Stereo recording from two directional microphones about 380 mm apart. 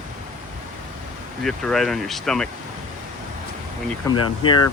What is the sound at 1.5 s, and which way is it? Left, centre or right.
Speech, centre.